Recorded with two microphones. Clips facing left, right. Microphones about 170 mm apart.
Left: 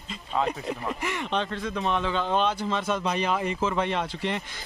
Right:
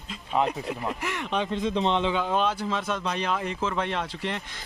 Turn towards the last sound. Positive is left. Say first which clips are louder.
# left 2 dB
turn(degrees=0)  # may be behind; listen again after turning